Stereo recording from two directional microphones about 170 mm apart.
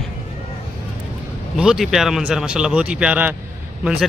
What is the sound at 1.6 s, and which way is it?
Speech, 5° right (ahead or behind).